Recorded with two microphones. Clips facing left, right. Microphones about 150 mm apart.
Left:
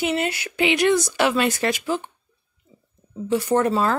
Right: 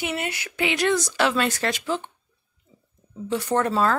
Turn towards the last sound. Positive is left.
turn(degrees=5)  # may be behind; listen again after turning